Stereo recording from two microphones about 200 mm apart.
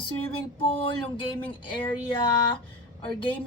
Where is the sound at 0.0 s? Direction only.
25° left (ahead or behind).